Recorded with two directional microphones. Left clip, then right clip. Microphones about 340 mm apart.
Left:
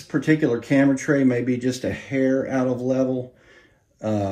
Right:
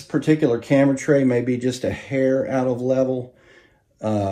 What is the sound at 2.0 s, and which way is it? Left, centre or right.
Speech, right.